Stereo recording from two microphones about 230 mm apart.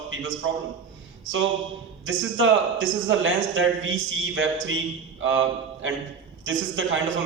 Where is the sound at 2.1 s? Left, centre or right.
Right.